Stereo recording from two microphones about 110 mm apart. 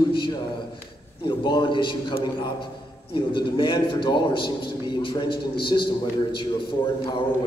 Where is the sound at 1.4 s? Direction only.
45° left (ahead or behind).